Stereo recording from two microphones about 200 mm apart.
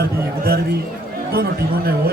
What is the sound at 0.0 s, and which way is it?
Speech, 50° right (ahead or behind).